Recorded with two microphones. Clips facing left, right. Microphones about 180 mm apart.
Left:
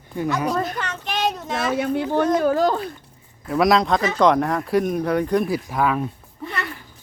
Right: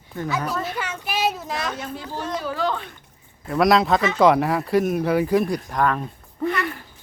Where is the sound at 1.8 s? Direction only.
60° left (ahead or behind); by 2.9 s 40° left (ahead or behind).